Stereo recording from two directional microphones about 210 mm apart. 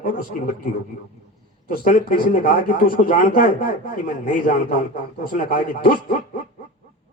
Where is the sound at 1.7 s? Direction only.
40° left (ahead or behind).